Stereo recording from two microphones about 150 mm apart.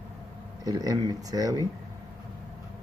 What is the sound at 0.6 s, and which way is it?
Speech, 25° right (ahead or behind).